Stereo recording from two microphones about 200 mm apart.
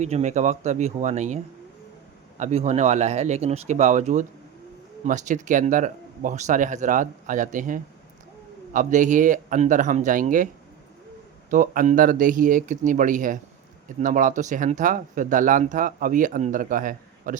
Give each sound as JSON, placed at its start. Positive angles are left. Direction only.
{"t": 0.0, "sound": "speech", "side_deg": -35}
{"t": 2.4, "sound": "speech", "side_deg": -35}
{"t": 11.5, "sound": "speech", "side_deg": -40}